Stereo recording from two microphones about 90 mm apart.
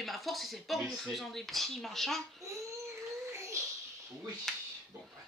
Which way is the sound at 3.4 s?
30° right (ahead or behind).